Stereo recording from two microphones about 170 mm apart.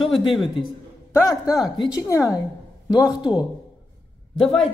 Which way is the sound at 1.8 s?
25° left (ahead or behind).